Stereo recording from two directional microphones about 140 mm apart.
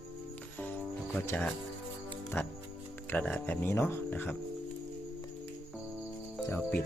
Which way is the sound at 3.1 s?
10° left (ahead or behind).